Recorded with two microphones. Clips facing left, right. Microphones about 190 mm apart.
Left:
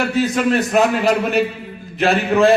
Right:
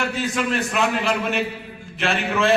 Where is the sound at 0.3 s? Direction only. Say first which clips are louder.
Left 7 dB; 40° left (ahead or behind).